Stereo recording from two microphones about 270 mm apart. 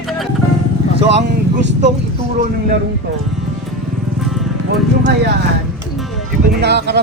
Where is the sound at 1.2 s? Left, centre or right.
Right.